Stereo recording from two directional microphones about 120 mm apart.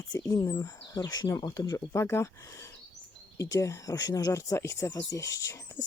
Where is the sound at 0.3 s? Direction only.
30° left (ahead or behind).